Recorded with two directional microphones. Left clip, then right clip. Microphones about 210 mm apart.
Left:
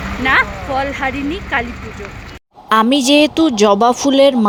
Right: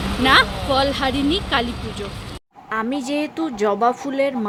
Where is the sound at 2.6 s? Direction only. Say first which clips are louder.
Left 12 dB; 35° left (ahead or behind).